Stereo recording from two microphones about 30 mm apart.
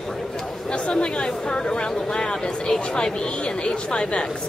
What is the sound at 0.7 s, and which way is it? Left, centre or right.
Speech, left.